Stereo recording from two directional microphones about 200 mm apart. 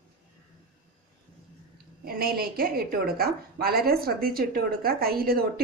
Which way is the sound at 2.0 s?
50° right (ahead or behind).